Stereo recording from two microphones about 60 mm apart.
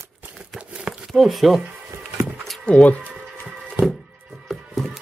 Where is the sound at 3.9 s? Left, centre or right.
Centre.